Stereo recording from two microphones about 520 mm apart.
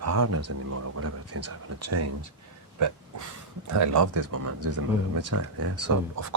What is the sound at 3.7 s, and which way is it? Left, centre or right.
Speech, right.